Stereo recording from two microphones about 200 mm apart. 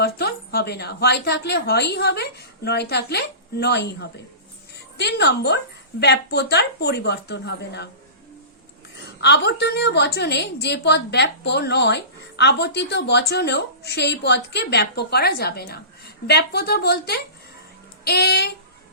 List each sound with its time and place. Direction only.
0.0 s a woman's voice: 55° left (ahead or behind)
9.2 s a woman's voice: 60° left (ahead or behind)